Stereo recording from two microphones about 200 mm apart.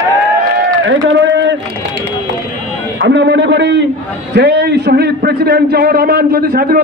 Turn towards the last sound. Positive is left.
turn(degrees=-45)  # may be behind; listen again after turning